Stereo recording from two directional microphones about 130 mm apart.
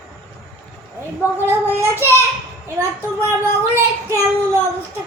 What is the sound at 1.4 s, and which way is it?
Speech, 15° right (ahead or behind).